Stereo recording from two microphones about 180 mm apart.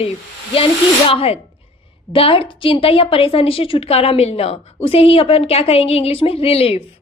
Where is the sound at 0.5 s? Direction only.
30° left (ahead or behind).